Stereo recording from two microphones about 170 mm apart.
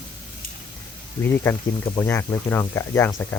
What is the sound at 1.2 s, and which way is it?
Speech, 10° left (ahead or behind).